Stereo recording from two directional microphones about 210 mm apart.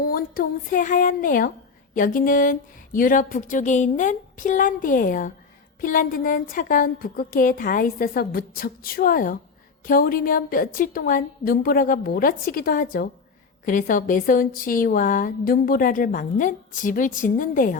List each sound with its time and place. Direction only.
0.0 s a woman's voice: 45° left (ahead or behind)